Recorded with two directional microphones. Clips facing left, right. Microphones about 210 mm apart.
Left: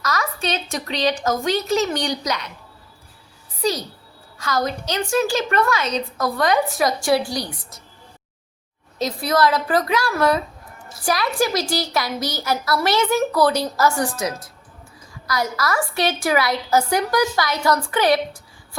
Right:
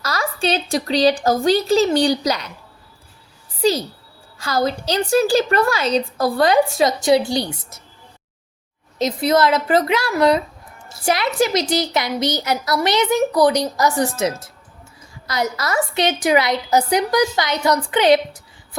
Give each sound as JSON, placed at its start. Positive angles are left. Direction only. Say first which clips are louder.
{"t": 0.0, "sound": "a woman's voice", "louder": "right 3 dB", "side_deg": -30}
{"t": 3.6, "sound": "a woman's voice", "louder": "right 5 dB", "side_deg": -30}
{"t": 9.0, "sound": "a woman's voice", "louder": "right 3 dB", "side_deg": -20}